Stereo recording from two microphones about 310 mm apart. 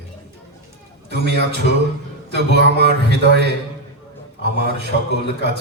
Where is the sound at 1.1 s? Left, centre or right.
Right.